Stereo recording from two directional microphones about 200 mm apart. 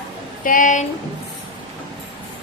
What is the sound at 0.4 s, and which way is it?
Speech, 40° left (ahead or behind).